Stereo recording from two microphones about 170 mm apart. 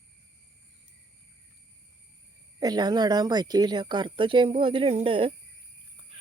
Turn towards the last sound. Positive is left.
turn(degrees=-30)  # may be behind; listen again after turning